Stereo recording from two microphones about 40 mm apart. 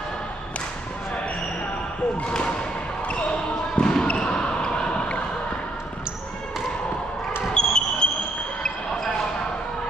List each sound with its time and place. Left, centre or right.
3.1 s basketball bounce: left
7.5 s basketball bounce: left